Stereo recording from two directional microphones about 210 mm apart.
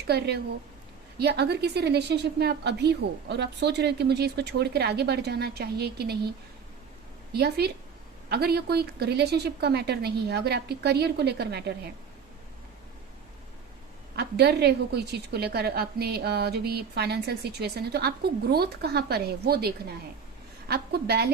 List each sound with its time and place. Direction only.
0.1 s a woman's voice: 50° right (ahead or behind)
7.3 s a woman's voice: 50° right (ahead or behind)
14.2 s a woman's voice: 50° right (ahead or behind)